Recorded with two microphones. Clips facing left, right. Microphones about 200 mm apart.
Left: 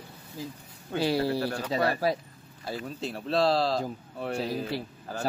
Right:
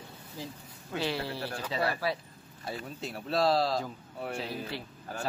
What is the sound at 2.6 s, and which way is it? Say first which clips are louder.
Speech: left 4 dB; 30° left (ahead or behind).